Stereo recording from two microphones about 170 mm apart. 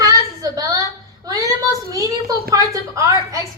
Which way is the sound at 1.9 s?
20° right (ahead or behind).